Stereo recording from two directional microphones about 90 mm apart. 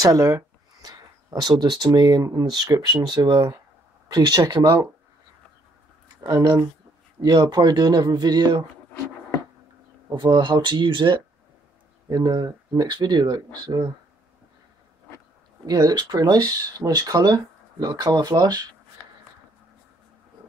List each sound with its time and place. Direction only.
0.0 s speech: 40° right (ahead or behind)
6.2 s speech: 50° right (ahead or behind)
10.1 s speech: 60° right (ahead or behind)
12.1 s speech: 50° right (ahead or behind)
15.6 s speech: 45° right (ahead or behind)